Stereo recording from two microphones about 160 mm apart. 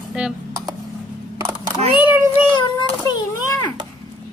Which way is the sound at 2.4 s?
30° left (ahead or behind).